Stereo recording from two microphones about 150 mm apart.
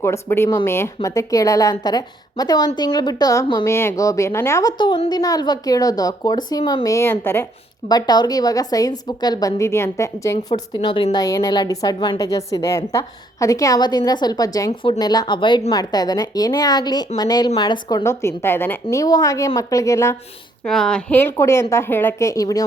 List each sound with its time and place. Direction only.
0.0 s a woman's voice: 15° left (ahead or behind)
4.8 s a woman's voice: 30° left (ahead or behind); by 7.4 s 15° left (ahead or behind)
7.9 s a woman's voice: 25° left (ahead or behind)
10.3 s a woman's voice: 35° left (ahead or behind); by 20.1 s 20° left (ahead or behind)
20.7 s a woman's voice: 5° left (ahead or behind); by 22.6 s 25° left (ahead or behind)